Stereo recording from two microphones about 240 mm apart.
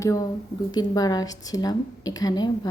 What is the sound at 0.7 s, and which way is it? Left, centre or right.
A woman's voice, centre.